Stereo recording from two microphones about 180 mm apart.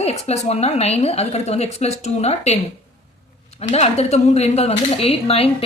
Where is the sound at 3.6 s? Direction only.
35° left (ahead or behind).